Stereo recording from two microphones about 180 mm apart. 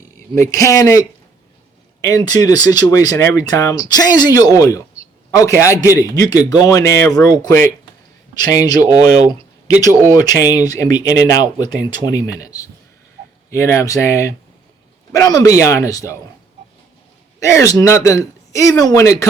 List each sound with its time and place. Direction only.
0.3 s speech: 15° left (ahead or behind)
9.9 s speech: 15° right (ahead or behind)
10.2 s speech: 20° left (ahead or behind)
17.4 s speech: 15° left (ahead or behind)